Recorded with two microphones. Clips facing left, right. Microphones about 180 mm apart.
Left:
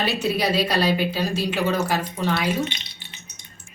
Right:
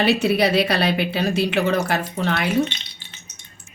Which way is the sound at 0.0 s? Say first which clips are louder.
Right 5 dB; 65° right (ahead or behind).